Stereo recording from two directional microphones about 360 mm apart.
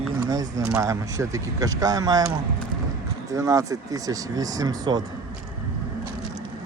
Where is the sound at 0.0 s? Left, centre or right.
Centre.